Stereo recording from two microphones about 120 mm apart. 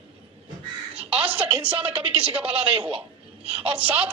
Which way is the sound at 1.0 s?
15° right (ahead or behind).